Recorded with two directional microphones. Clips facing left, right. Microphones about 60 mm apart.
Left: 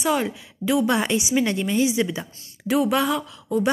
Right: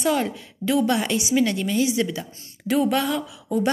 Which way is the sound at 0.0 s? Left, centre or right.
Centre.